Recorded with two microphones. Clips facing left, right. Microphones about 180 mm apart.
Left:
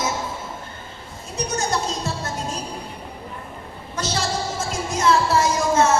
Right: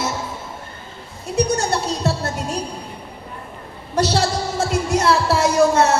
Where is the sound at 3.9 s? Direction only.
65° right (ahead or behind).